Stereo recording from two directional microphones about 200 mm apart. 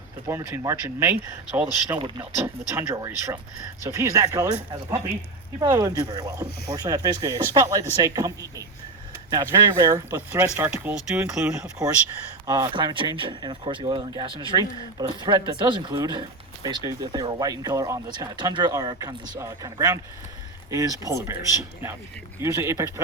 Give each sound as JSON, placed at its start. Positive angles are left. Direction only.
{"t": 0.3, "sound": "speech", "side_deg": -15}
{"t": 12.5, "sound": "speech", "side_deg": -20}